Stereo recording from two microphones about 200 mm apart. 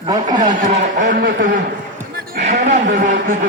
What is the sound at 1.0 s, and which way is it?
Speech, 45° right (ahead or behind).